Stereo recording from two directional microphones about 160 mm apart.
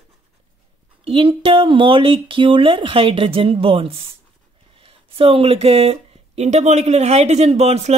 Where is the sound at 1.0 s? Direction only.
35° right (ahead or behind).